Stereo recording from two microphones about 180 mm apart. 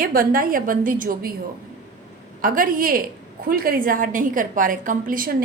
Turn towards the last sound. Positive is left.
turn(degrees=-50)  # may be behind; listen again after turning